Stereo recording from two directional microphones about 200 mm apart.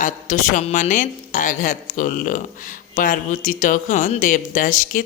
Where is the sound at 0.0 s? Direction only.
40° left (ahead or behind).